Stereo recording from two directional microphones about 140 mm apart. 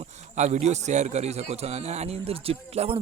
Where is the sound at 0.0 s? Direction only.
55° right (ahead or behind).